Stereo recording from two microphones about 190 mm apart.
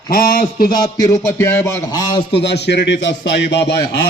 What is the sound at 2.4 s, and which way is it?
A man's voice, 60° left (ahead or behind).